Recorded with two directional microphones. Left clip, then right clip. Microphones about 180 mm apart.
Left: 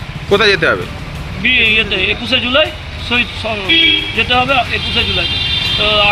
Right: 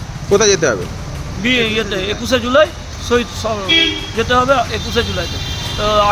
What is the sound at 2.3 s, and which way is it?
Speech, 20° right (ahead or behind).